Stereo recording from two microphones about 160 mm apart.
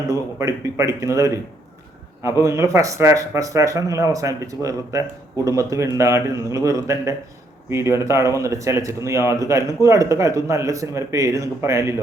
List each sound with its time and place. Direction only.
0.1 s speech: 20° right (ahead or behind)